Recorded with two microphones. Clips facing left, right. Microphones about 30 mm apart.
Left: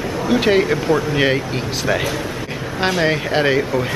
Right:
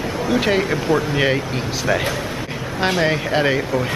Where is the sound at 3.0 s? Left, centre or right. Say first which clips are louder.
Left 1 dB; centre.